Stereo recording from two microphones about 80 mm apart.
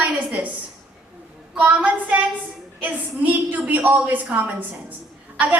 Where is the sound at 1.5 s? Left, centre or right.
Centre.